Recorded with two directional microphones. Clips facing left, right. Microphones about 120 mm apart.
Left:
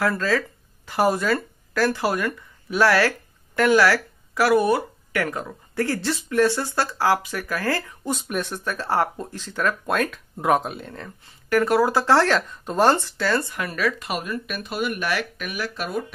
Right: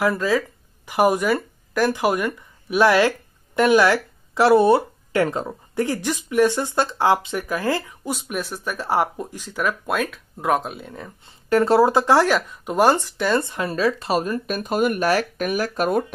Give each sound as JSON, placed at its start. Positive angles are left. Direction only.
{"t": 0.0, "sound": "speech", "side_deg": -15}
{"t": 8.1, "sound": "speech", "side_deg": -5}
{"t": 11.2, "sound": "speech", "side_deg": -25}